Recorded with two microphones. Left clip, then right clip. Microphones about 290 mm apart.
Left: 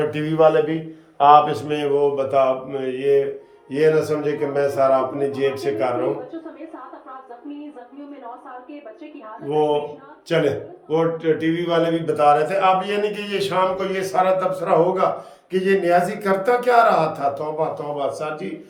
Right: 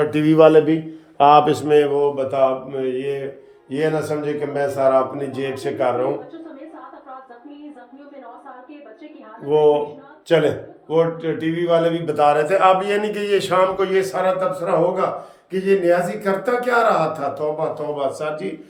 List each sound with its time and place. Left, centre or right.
0.0 s a sound: centre
0.3 s a man's voice: right
1.5 s a man's voice: centre
9.5 s a man's voice: centre